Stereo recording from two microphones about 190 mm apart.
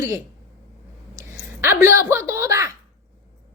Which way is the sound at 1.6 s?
15° right (ahead or behind).